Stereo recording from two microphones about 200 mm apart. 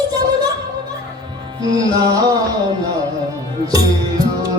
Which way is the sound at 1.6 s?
20° right (ahead or behind).